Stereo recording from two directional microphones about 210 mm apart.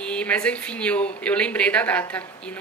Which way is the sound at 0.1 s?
5° left (ahead or behind).